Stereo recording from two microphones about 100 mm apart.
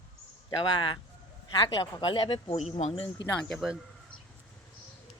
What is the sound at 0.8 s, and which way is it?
Speech, 55° left (ahead or behind).